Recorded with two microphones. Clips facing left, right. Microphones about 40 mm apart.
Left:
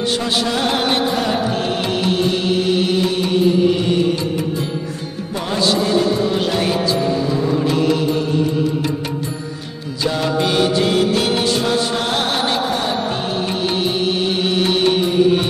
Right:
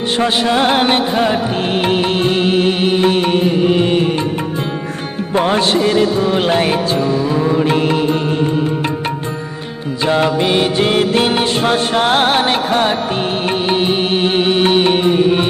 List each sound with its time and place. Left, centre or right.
0.2 s music: right
5.3 s music: right
10.0 s music: right